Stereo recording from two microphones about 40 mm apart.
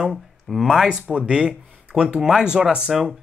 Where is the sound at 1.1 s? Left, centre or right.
Right.